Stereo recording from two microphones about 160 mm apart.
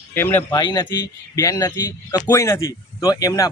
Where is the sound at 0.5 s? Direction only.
25° left (ahead or behind).